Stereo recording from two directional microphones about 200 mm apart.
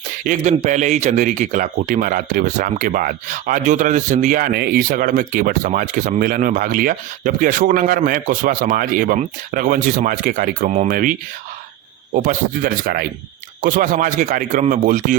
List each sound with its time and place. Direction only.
0.3 s a man's voice: 35° right (ahead or behind)
12.1 s a man's voice: 45° right (ahead or behind)